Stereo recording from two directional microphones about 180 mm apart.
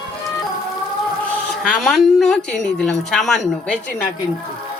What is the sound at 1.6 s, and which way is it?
A woman's voice, centre (ahead or behind).